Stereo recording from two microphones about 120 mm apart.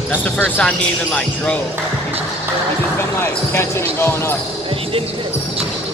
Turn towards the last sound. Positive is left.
turn(degrees=20)  # may be behind; listen again after turning